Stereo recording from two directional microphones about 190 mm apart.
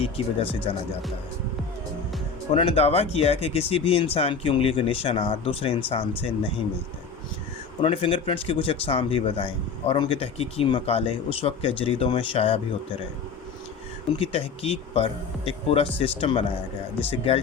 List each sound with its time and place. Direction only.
0.0 s speech: 30° left (ahead or behind)
2.5 s speech: 30° left (ahead or behind)
7.8 s speech: 30° left (ahead or behind)
14.2 s speech: 30° left (ahead or behind)